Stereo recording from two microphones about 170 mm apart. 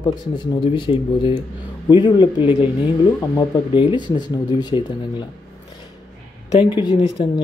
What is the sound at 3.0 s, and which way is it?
Speech, 20° left (ahead or behind).